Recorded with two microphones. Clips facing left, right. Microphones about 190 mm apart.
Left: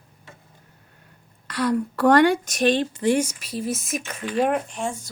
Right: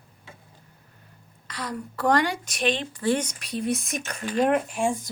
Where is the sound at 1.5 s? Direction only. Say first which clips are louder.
Left 11 dB; 65° left (ahead or behind); by 2.7 s 45° left (ahead or behind).